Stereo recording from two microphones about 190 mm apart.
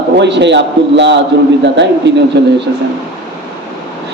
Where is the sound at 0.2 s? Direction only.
65° right (ahead or behind).